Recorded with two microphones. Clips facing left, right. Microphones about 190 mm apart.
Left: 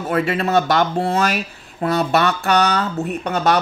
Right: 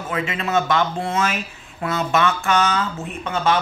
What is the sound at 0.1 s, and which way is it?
Speech, 40° left (ahead or behind).